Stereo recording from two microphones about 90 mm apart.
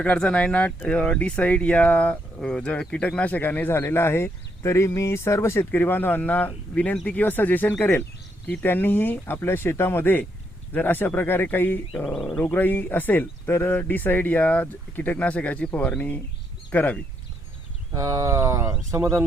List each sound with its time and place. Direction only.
0.0 s speech: 10° left (ahead or behind)
12.1 s speech: 5° left (ahead or behind)
12.5 s speech: 20° left (ahead or behind)
17.9 s speech: 40° right (ahead or behind)